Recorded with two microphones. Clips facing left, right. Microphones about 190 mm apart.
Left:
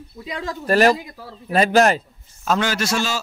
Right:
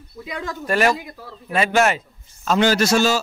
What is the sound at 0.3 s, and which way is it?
Speech, 35° left (ahead or behind).